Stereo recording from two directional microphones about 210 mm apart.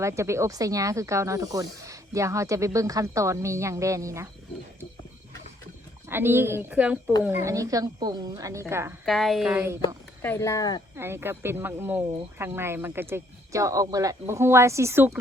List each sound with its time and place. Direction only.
0.0 s speech: 15° right (ahead or behind)
6.1 s speech: 10° right (ahead or behind)
9.0 s speech: centre (ahead or behind)
10.2 s speech: 15° left (ahead or behind)
10.9 s speech: 10° right (ahead or behind)